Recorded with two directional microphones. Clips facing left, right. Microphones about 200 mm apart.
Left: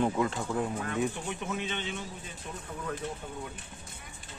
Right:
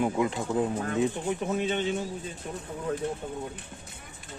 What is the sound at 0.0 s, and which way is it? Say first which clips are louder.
Speech: right 2 dB; 15° right (ahead or behind).